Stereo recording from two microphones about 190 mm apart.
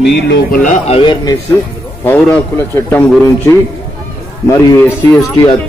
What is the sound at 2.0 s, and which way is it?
A man's voice, 10° left (ahead or behind).